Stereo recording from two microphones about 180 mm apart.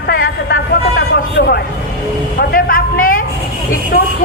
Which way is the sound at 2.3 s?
50° left (ahead or behind).